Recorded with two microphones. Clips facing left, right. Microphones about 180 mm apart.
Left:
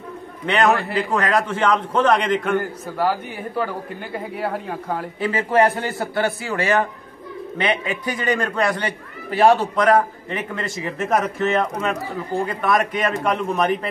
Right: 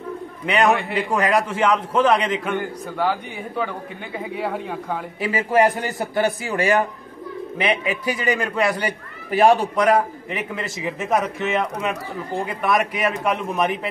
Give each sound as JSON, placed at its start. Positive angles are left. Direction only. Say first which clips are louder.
{"t": 0.5, "sound": "speech", "louder": "even", "side_deg": -10}
{"t": 2.5, "sound": "a man's voice", "louder": "left 3 dB", "side_deg": 5}
{"t": 5.2, "sound": "a man's voice", "louder": "even", "side_deg": -10}